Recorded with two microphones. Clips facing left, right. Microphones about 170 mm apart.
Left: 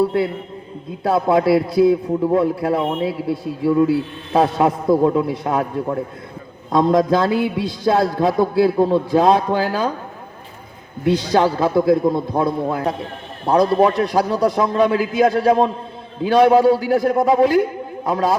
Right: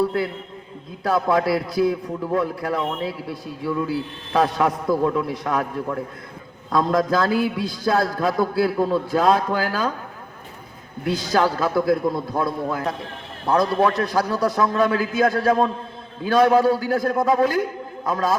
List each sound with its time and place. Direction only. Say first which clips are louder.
0.0 s a man's voice: left 4 dB; 25° left (ahead or behind)
11.0 s a man's voice: left 4 dB; 25° left (ahead or behind)